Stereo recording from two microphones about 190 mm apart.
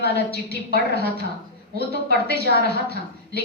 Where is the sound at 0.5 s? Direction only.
60° left (ahead or behind).